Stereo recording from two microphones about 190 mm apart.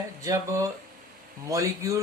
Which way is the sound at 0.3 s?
15° right (ahead or behind).